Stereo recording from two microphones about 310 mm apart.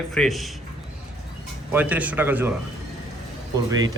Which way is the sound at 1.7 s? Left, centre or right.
Centre.